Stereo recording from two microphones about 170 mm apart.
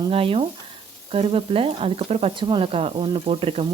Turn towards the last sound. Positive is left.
turn(degrees=-35)  # may be behind; listen again after turning